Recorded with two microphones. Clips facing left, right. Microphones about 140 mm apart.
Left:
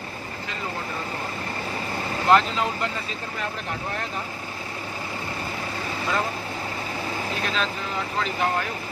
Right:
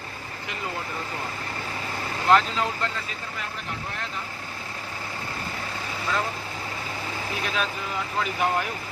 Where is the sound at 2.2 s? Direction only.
Centre (ahead or behind).